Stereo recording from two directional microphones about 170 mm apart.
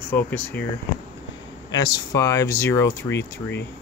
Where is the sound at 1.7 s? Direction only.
25° left (ahead or behind).